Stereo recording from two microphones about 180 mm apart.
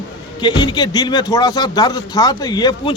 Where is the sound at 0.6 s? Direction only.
25° left (ahead or behind).